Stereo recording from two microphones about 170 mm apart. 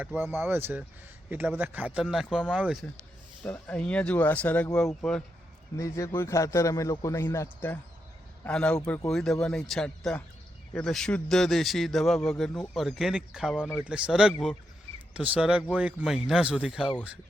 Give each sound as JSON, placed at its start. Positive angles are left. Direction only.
{"t": 0.0, "sound": "speech", "side_deg": -10}
{"t": 3.4, "sound": "a man's voice", "side_deg": 10}
{"t": 5.7, "sound": "a man's voice", "side_deg": 20}